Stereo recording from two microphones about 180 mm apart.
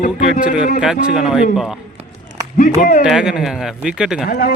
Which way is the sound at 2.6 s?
45° left (ahead or behind).